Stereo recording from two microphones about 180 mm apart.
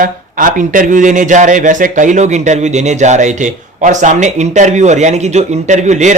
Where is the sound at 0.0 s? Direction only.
50° right (ahead or behind).